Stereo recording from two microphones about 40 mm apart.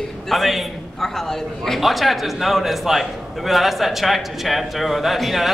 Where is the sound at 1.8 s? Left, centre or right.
Centre.